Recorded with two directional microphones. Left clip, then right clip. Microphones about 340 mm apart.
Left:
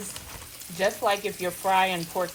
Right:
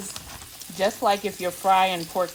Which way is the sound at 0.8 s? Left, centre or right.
Right.